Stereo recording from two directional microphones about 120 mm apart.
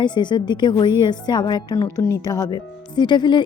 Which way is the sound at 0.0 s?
40° left (ahead or behind).